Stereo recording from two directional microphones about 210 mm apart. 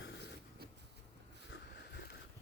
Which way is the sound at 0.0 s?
55° left (ahead or behind).